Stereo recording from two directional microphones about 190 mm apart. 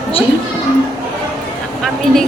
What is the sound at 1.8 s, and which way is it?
Speech, centre (ahead or behind).